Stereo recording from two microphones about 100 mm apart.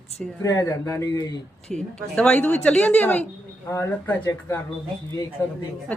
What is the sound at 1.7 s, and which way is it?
Speech, 5° left (ahead or behind).